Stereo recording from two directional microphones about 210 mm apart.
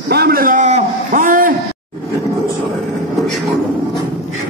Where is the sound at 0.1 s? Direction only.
50° right (ahead or behind).